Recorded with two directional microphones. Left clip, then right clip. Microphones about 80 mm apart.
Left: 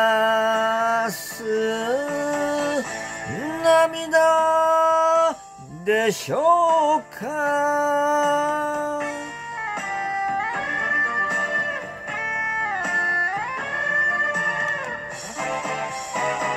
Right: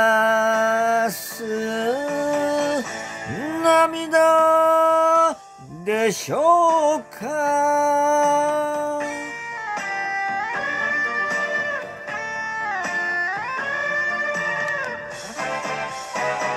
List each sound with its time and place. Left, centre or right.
0.0 s music: right
3.5 s a sound: right
5.9 s music: right
9.7 s music: right